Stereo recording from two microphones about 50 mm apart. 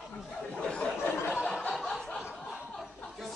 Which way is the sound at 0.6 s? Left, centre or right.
Left.